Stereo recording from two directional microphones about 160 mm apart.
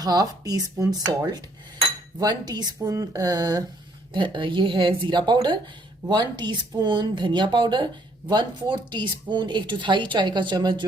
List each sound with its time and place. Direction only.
0.0 s speech: 25° right (ahead or behind)